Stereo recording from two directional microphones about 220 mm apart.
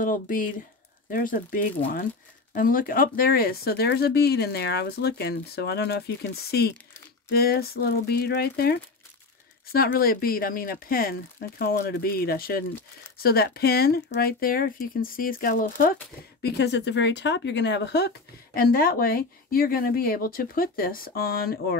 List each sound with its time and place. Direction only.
0.0 s speech: 40° left (ahead or behind)